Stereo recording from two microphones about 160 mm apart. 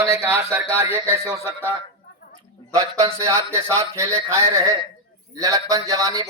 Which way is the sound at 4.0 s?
20° right (ahead or behind).